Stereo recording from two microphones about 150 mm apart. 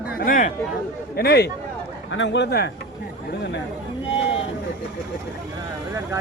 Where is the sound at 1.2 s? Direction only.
90° left.